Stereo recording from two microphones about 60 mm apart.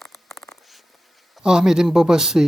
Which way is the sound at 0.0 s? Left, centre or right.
Centre.